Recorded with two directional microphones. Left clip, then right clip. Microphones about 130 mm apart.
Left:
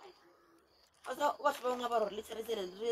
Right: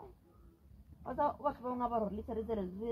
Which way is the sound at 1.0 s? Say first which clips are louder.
Left 2 dB; 15° left (ahead or behind).